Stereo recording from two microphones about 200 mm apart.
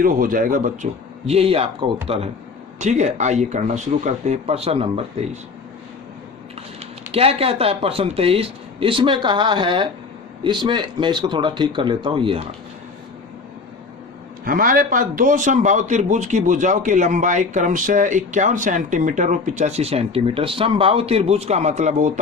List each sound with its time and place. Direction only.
0.0 s speech: 45° right (ahead or behind)
1.3 s a man's voice: 30° right (ahead or behind)
7.1 s speech: 30° right (ahead or behind)
14.4 s a man's voice: 45° right (ahead or behind)